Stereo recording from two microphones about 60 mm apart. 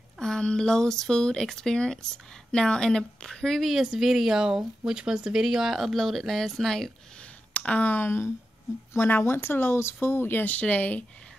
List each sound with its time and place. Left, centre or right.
0.2 s a woman's voice: centre
3.6 s speech: centre
7.2 s a sound: centre; by 8.3 s left
8.9 s speech: left